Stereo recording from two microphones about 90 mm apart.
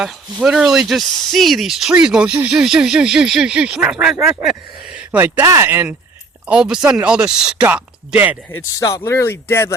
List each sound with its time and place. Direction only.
0.0 s speech: 10° right (ahead or behind)
4.9 s a sound: 15° right (ahead or behind)
5.5 s speech: 30° right (ahead or behind)
6.5 s speech: 10° right (ahead or behind)
9.0 s speech: 30° left (ahead or behind)